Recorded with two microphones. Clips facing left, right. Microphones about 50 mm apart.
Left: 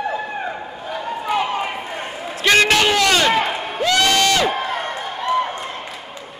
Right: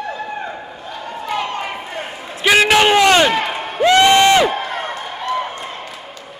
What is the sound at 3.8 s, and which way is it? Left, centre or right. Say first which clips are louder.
Crowd: right 6 dB; right.